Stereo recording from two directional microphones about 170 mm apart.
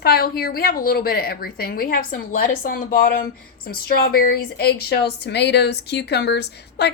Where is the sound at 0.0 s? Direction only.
65° left (ahead or behind).